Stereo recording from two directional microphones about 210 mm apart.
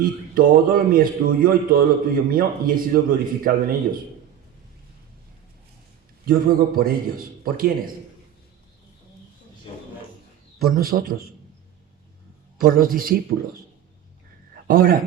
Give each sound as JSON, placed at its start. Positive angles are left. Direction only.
{"t": 0.0, "sound": "a man's voice", "side_deg": -40}
{"t": 6.2, "sound": "a man's voice", "side_deg": -45}
{"t": 10.6, "sound": "a man's voice", "side_deg": -45}
{"t": 12.5, "sound": "a man's voice", "side_deg": -45}
{"t": 14.7, "sound": "a man's voice", "side_deg": -45}